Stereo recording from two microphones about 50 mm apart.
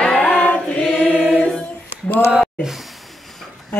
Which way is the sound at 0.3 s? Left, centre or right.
Left.